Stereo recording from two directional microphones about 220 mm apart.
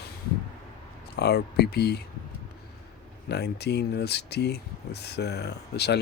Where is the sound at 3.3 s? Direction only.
50° left (ahead or behind).